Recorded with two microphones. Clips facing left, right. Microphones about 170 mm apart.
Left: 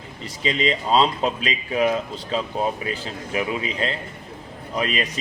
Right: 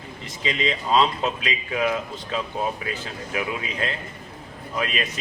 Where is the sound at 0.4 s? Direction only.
30° left (ahead or behind).